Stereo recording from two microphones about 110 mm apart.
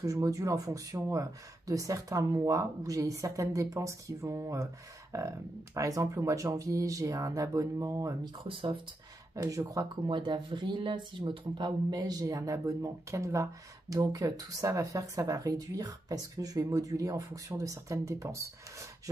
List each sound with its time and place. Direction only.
0.0 s speech: 30° right (ahead or behind)
8.5 s speech: 50° right (ahead or behind)
9.3 s speech: 30° right (ahead or behind)
10.0 s speech: 45° right (ahead or behind); by 18.9 s 30° right (ahead or behind)